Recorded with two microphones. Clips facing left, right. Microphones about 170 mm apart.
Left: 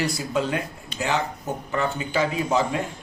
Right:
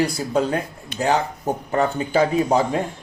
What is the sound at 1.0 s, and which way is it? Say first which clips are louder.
A man's voice: right 5 dB; 45° right (ahead or behind).